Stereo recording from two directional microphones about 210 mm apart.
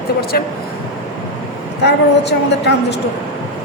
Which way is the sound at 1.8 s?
55° left (ahead or behind).